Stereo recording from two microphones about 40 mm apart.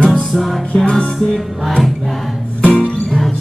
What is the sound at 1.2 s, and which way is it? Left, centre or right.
Music, centre.